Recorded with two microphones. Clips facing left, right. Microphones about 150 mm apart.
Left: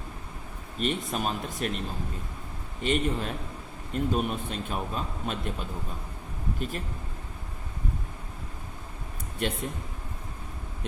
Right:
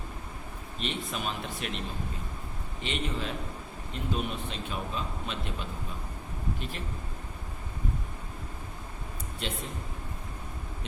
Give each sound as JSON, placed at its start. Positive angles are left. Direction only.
{"t": 0.8, "sound": "speech", "side_deg": 45}
{"t": 2.8, "sound": "speech", "side_deg": 45}
{"t": 9.4, "sound": "a man's voice", "side_deg": 55}